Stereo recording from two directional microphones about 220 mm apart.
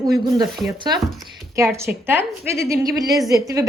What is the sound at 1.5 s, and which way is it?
Speech, 10° right (ahead or behind).